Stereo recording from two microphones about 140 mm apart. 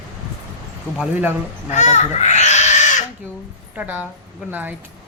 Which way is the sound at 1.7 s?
55° left (ahead or behind).